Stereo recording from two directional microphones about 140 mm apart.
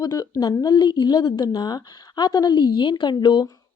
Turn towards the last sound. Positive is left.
turn(degrees=35)  # may be behind; listen again after turning